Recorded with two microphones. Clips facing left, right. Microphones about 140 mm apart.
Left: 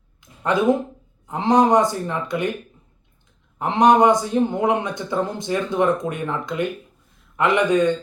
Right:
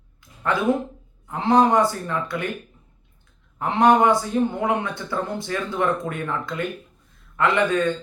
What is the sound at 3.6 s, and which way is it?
A woman's voice, 20° left (ahead or behind).